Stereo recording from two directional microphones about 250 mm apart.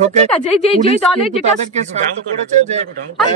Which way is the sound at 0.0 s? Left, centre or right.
Right.